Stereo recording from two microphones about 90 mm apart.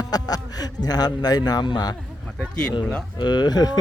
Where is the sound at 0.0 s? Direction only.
45° left (ahead or behind).